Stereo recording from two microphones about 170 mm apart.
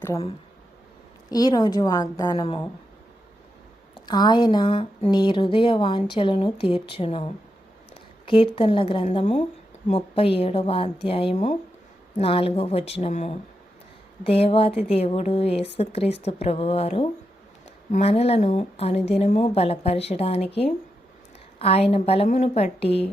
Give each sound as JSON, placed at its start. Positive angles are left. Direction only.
{"t": 1.3, "sound": "a woman's voice", "side_deg": 25}
{"t": 3.9, "sound": "speech", "side_deg": 25}
{"t": 21.6, "sound": "speech", "side_deg": 35}